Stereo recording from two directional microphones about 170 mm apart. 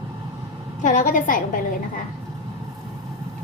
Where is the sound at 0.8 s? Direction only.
50° left (ahead or behind).